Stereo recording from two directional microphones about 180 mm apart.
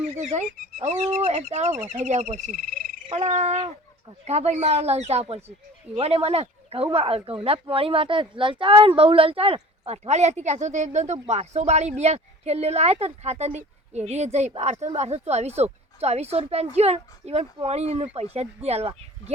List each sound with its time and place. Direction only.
0.2 s speech: 40° right (ahead or behind)
3.1 s speech: 40° right (ahead or behind)